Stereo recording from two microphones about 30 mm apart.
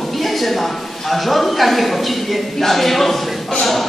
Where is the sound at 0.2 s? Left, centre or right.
Centre.